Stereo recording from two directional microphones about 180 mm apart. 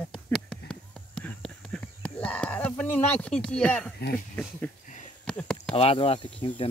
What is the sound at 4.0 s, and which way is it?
Speech, 50° left (ahead or behind).